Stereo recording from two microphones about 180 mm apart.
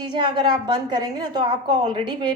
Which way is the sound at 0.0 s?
25° right (ahead or behind).